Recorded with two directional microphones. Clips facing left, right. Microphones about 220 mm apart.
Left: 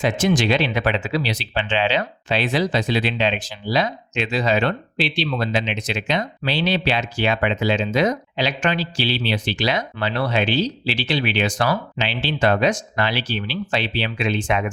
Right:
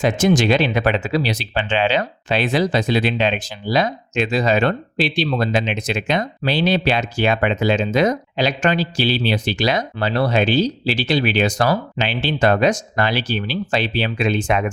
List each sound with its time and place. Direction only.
0.0 s speech: 45° right (ahead or behind)